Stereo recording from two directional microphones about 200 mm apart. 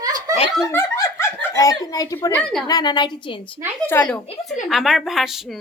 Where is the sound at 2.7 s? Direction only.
20° left (ahead or behind).